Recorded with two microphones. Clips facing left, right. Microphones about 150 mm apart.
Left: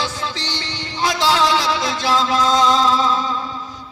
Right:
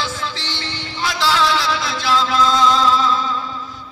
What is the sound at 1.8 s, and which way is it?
Music, 40° left (ahead or behind).